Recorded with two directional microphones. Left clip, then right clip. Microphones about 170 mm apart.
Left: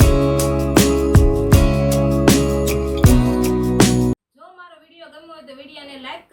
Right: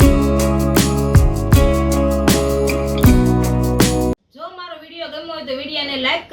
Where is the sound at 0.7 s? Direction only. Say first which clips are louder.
Left 2 dB; centre (ahead or behind).